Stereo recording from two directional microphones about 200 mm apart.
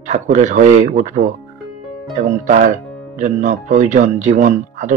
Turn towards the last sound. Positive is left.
turn(degrees=-40)  # may be behind; listen again after turning